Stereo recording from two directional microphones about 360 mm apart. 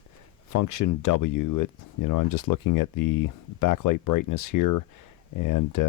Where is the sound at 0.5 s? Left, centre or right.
Left.